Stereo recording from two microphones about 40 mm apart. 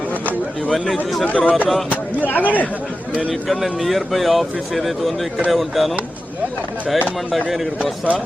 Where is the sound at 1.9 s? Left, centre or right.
Left.